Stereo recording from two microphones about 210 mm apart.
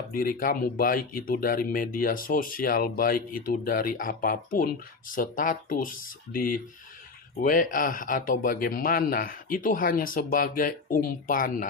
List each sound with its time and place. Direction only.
0.1 s speech: 40° left (ahead or behind)